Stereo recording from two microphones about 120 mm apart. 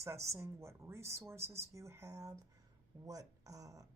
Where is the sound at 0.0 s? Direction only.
25° right (ahead or behind).